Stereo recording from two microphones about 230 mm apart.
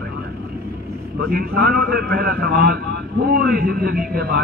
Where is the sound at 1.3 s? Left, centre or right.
Right.